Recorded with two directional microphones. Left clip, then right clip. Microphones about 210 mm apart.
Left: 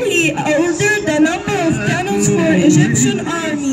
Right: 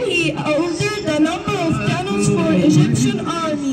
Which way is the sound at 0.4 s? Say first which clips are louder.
Left 4 dB; 25° right (ahead or behind).